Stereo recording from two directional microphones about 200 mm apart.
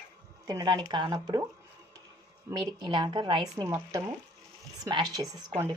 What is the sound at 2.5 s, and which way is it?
Speech, 25° right (ahead or behind).